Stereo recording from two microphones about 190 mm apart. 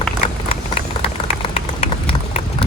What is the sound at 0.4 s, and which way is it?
Vehicle, 30° left (ahead or behind).